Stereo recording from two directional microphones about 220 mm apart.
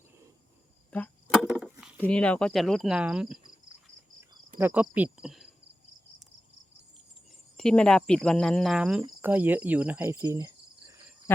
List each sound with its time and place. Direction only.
0.9 s a sound: 5° left (ahead or behind)
2.0 s cricket: 5° left (ahead or behind)
7.5 s cricket: 5° left (ahead or behind); by 10.9 s 15° right (ahead or behind)